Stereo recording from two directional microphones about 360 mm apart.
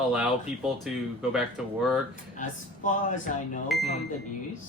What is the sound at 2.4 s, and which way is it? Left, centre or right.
Speech, left.